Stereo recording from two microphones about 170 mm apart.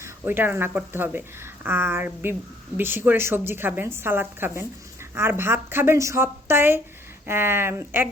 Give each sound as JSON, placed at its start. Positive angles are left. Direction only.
{"t": 0.0, "sound": "speech", "side_deg": -10}